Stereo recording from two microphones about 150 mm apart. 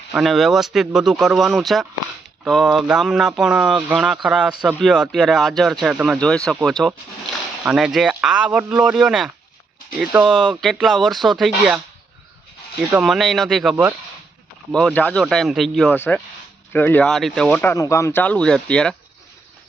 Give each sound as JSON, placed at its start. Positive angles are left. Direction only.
{"t": 0.1, "sound": "speech", "side_deg": 0}
{"t": 12.9, "sound": "speech", "side_deg": -5}